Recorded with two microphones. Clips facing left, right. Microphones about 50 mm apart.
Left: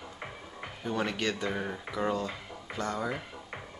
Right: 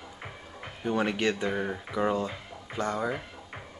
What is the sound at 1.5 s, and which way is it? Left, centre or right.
Speech, centre.